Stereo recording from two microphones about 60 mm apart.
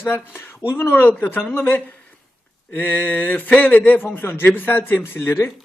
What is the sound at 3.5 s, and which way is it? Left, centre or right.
A man's voice, left.